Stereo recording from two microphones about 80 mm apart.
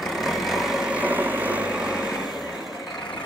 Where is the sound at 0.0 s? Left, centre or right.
Centre.